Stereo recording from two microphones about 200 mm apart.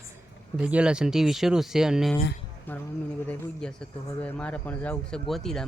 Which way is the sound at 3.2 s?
5° left (ahead or behind).